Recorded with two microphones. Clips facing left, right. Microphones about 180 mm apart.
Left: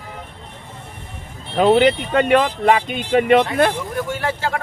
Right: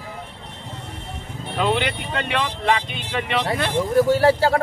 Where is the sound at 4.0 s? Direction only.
35° right (ahead or behind).